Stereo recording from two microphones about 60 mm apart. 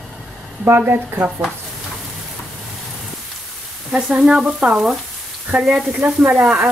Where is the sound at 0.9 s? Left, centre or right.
Right.